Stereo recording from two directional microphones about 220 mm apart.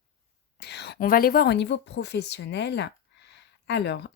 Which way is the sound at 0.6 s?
50° left (ahead or behind).